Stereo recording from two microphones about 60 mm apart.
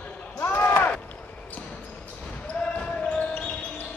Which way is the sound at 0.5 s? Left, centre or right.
Left.